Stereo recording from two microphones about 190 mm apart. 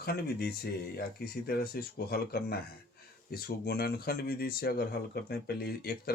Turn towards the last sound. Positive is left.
turn(degrees=55)  # may be behind; listen again after turning